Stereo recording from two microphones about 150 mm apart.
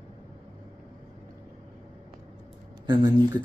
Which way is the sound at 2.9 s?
25° right (ahead or behind).